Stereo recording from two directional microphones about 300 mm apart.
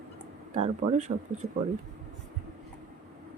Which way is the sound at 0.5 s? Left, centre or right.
Right.